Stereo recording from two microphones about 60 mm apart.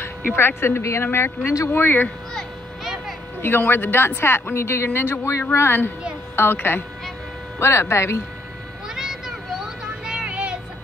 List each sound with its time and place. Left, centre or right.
0.4 s speech: left
2.8 s a sound: centre
3.3 s speech: left
8.8 s vehicle: centre